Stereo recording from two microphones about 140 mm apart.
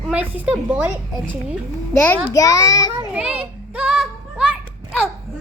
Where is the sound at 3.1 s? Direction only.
10° right (ahead or behind).